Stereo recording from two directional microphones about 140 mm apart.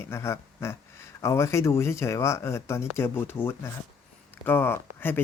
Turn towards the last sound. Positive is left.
turn(degrees=15)  # may be behind; listen again after turning